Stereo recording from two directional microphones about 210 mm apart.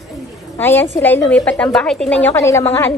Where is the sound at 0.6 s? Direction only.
10° left (ahead or behind).